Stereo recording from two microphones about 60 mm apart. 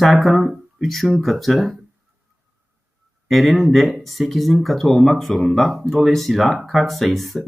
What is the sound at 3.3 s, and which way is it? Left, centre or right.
Speech, centre.